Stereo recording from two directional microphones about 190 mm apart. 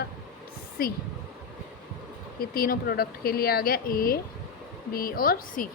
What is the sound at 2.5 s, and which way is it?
A woman's voice, 50° left (ahead or behind).